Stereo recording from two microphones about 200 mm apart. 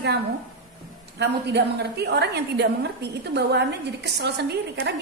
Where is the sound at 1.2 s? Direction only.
55° right (ahead or behind).